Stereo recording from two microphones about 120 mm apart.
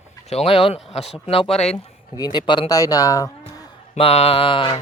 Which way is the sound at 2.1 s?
35° left (ahead or behind).